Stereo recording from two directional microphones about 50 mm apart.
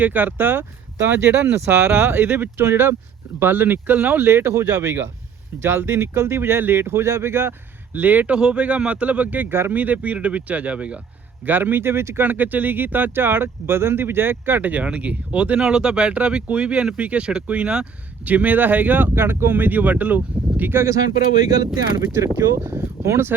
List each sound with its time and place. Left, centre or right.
0.0 s speech: right
4.3 s speech: right
7.9 s speech: right
8.3 s speech: centre
9.5 s speech: right
9.7 s speech: right
11.4 s speech: right
12.2 s speech: right
14.6 s speech: right
18.3 s speech: right
20.6 s speech: right
22.1 s speech: right